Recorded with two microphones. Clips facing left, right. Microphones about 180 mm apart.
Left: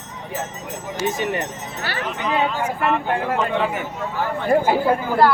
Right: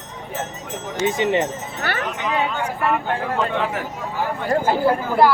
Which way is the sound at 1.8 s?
55° right (ahead or behind).